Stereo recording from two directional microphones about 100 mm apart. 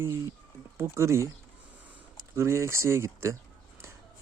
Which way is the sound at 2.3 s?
30° right (ahead or behind).